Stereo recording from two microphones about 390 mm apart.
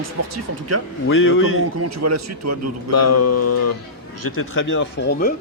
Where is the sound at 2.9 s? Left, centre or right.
Left.